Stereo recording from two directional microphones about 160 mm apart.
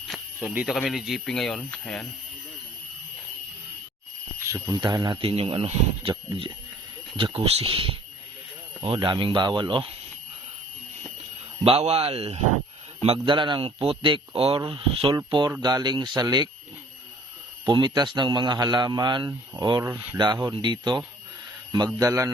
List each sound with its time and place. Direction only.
0.1 s a sound: centre (ahead or behind)
0.5 s speech: 5° right (ahead or behind)
4.4 s a man's voice: 20° right (ahead or behind)
11.6 s speech: 40° right (ahead or behind)
15.6 s a man's voice: 25° right (ahead or behind)
17.7 s a man's voice: 30° right (ahead or behind)
19.8 s speech: 15° right (ahead or behind)
20.1 s a man's voice: 25° right (ahead or behind)